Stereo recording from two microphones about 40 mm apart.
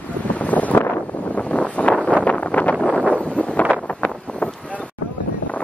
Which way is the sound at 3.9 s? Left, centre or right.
Left.